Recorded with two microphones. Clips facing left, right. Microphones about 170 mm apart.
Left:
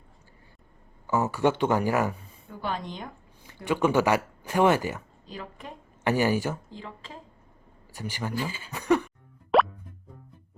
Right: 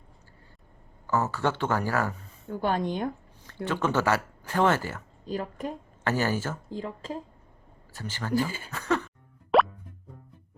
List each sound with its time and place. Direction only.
1.0 s speech: 15° left (ahead or behind)
2.5 s a woman's voice: 50° right (ahead or behind)
3.4 s speech: 15° left (ahead or behind)
5.2 s speech: 45° right (ahead or behind)
6.1 s speech: 15° left (ahead or behind)
6.7 s a woman's voice: 40° right (ahead or behind)
7.9 s speech: 15° left (ahead or behind)
8.4 s a woman's voice: 45° right (ahead or behind)
8.7 s throat clearing: 15° left (ahead or behind)
9.5 s plop: centre (ahead or behind)